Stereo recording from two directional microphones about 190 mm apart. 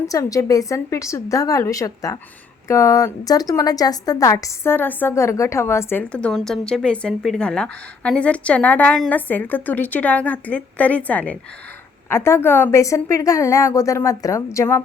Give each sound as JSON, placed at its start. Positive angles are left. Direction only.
{"t": 0.1, "sound": "a woman's voice", "side_deg": 15}